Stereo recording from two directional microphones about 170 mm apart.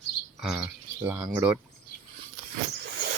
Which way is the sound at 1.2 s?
15° right (ahead or behind).